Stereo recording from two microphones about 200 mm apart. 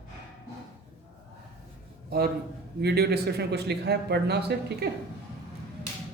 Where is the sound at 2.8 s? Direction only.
55° right (ahead or behind).